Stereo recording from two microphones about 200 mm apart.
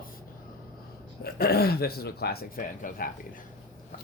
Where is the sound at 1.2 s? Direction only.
50° left (ahead or behind).